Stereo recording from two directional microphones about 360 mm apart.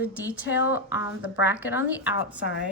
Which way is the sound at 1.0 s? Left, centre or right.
Left.